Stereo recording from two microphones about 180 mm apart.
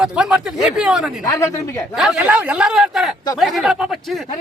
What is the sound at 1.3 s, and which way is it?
Speech, 15° left (ahead or behind).